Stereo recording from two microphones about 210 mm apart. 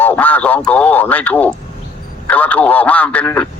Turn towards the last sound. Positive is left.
turn(degrees=5)  # may be behind; listen again after turning